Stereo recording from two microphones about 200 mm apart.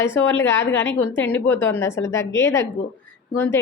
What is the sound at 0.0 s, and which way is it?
A woman's voice, 10° left (ahead or behind).